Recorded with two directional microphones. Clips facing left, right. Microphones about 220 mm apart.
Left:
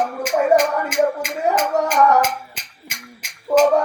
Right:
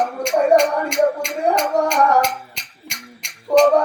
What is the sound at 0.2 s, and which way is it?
Music, 5° left (ahead or behind).